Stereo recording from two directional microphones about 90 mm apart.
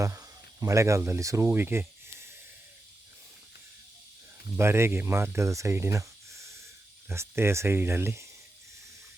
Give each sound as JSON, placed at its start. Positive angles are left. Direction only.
{"t": 0.0, "sound": "speech", "side_deg": -40}
{"t": 1.5, "sound": "snake", "side_deg": -25}
{"t": 4.5, "sound": "speech", "side_deg": -30}